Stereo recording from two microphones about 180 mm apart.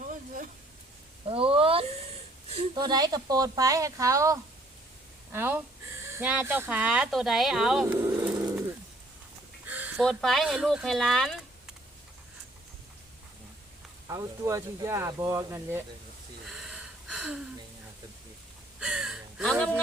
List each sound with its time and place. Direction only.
0.0 s a sound: 45° right (ahead or behind)
1.3 s a sound: 30° right (ahead or behind)
2.5 s speech: 30° right (ahead or behind); by 7.9 s centre (ahead or behind)
7.9 s vehicle: 15° right (ahead or behind)
9.6 s a sound: 10° right (ahead or behind)
10.0 s speech: centre (ahead or behind)
14.1 s speech: 15° right (ahead or behind)
16.5 s gasp: 5° right (ahead or behind)
18.8 s gasp: 5° right (ahead or behind)